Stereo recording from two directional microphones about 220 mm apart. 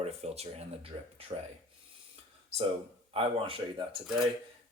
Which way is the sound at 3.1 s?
25° right (ahead or behind).